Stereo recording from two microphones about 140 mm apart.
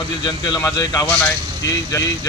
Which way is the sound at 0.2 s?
35° left (ahead or behind).